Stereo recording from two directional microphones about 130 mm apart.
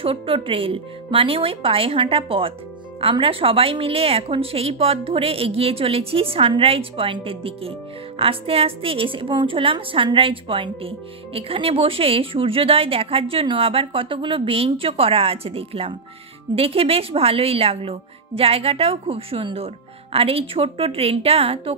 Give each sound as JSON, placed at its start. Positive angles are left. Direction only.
{"t": 0.0, "sound": "a woman's voice", "side_deg": -45}